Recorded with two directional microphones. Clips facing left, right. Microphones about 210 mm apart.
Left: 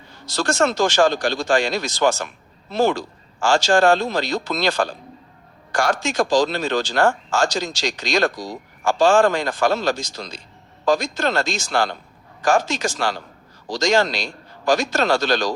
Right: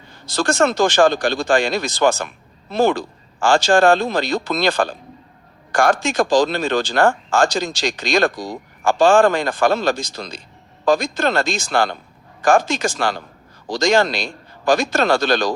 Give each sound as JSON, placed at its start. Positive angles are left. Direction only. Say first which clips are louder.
{"t": 0.3, "sound": "speech", "louder": "right 2 dB", "side_deg": -55}